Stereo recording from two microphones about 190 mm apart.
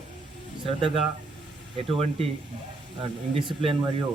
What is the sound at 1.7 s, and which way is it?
Speech, 30° right (ahead or behind).